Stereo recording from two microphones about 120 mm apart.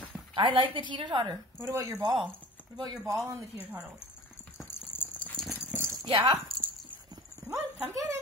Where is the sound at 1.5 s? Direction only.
25° right (ahead or behind).